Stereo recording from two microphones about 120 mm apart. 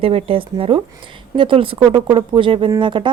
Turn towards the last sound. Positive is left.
turn(degrees=-40)  # may be behind; listen again after turning